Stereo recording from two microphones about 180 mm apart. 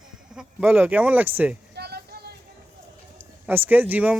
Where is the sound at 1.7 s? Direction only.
65° right (ahead or behind).